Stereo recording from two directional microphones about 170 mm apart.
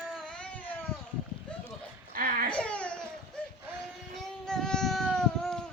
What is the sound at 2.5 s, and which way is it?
Baby cry, 5° left (ahead or behind).